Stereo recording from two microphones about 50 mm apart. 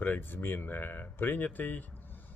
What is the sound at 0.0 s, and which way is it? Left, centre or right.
Speech, left.